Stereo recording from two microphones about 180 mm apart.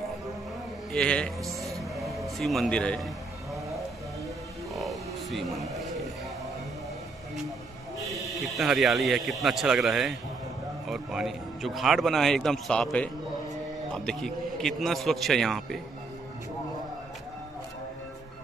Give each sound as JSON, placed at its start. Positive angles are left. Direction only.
{"t": 0.9, "sound": "a man's voice", "side_deg": 5}
{"t": 1.4, "sound": "speech", "side_deg": -15}
{"t": 1.7, "sound": "music", "side_deg": 0}
{"t": 4.7, "sound": "a sound", "side_deg": 0}
{"t": 8.1, "sound": "a man's voice", "side_deg": 0}